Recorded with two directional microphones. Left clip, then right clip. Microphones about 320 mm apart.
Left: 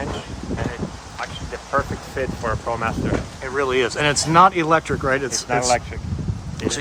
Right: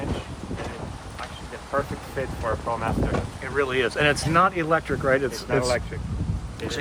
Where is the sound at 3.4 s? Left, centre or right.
Centre.